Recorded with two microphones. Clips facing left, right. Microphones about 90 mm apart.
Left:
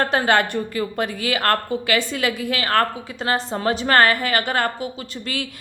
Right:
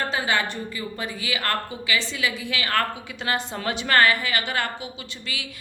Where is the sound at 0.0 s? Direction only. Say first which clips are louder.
Left 6 dB; 55° left (ahead or behind).